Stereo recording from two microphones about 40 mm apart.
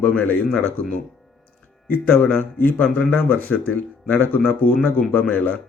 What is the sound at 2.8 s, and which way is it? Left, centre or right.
Speech, left.